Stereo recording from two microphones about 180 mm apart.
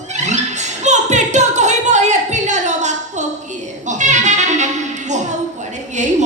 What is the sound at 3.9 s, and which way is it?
Music, 40° right (ahead or behind).